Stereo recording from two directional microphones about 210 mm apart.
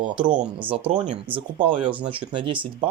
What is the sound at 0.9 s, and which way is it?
Speech, 30° right (ahead or behind).